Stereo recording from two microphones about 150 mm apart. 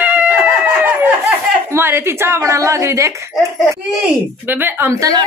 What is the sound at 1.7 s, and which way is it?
A woman's voice, 15° right (ahead or behind).